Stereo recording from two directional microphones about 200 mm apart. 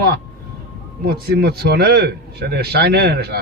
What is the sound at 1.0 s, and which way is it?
A man's voice, 50° right (ahead or behind).